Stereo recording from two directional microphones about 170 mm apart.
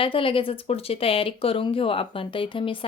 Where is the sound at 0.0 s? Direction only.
30° left (ahead or behind).